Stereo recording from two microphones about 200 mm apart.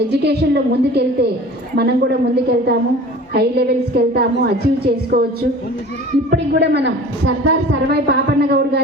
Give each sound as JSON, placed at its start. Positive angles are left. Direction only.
{"t": 0.1, "sound": "a woman's voice", "side_deg": -55}